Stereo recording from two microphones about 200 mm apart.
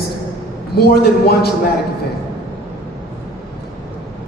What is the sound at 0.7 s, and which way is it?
Speech, 50° left (ahead or behind).